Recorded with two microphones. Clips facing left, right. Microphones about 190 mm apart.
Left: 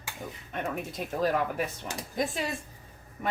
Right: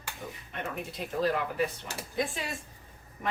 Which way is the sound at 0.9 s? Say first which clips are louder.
Left 1 dB; 45° left (ahead or behind).